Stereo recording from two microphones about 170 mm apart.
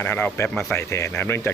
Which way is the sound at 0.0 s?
10° left (ahead or behind).